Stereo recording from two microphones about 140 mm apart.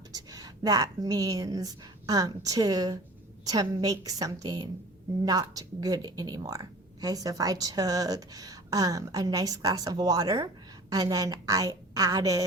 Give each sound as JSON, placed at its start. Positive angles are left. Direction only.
{"t": 0.1, "sound": "a woman's voice", "side_deg": -25}